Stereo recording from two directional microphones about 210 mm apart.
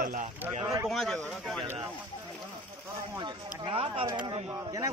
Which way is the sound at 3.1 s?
20° right (ahead or behind).